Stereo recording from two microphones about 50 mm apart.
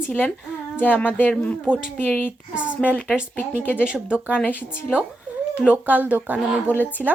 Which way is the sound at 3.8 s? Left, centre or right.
Centre.